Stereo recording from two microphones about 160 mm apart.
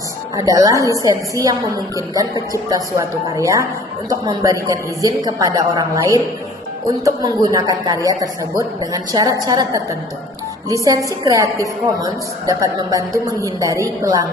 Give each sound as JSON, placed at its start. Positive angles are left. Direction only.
{"t": 0.3, "sound": "a woman's voice", "side_deg": -20}